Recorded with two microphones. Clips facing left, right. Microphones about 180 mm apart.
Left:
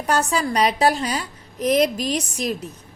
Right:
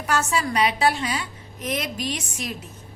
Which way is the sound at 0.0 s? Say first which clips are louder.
Left 3 dB; 35° left (ahead or behind).